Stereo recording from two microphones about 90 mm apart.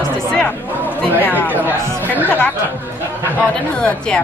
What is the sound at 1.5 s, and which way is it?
Speech, 20° right (ahead or behind).